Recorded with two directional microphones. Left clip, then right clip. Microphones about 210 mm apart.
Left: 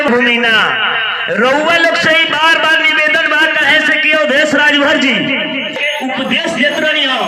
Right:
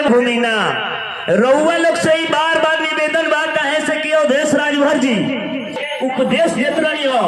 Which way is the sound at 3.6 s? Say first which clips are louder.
Left 7 dB; 35° right (ahead or behind).